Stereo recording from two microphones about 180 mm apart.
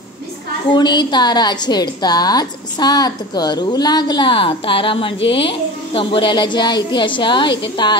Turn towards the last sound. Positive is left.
turn(degrees=25)  # may be behind; listen again after turning